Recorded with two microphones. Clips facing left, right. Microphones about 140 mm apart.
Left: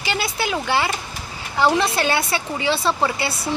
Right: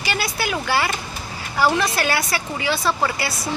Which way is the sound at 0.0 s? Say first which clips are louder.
Left 1 dB; 20° left (ahead or behind).